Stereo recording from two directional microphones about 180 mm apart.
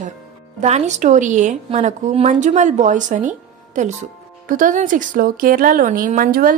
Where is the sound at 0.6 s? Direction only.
40° right (ahead or behind).